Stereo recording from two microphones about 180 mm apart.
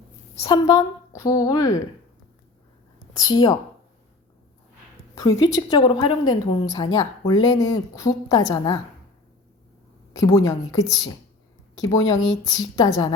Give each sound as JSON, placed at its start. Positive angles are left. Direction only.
{"t": 0.4, "sound": "a woman's voice", "side_deg": 20}
{"t": 3.2, "sound": "a woman's voice", "side_deg": 20}
{"t": 5.1, "sound": "a woman's voice", "side_deg": 20}
{"t": 10.1, "sound": "a woman's voice", "side_deg": 20}